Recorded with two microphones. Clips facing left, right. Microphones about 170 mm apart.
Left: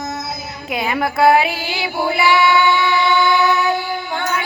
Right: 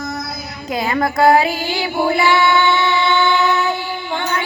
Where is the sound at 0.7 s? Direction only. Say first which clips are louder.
Right 2 dB; 5° left (ahead or behind).